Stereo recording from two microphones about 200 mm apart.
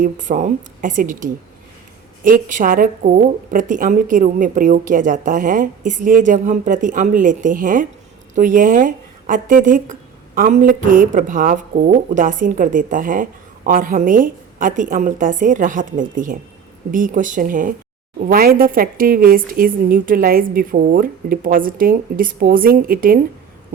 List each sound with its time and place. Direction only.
0.0 s a woman's voice: 40° right (ahead or behind)